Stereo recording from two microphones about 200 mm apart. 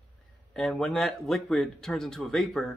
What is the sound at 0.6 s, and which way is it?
Speech, centre (ahead or behind).